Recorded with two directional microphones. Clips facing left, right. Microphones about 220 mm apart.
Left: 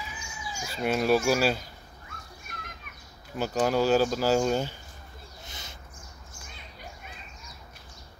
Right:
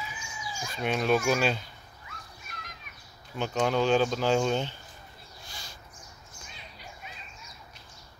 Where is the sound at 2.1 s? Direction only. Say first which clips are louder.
Even; 50° left (ahead or behind).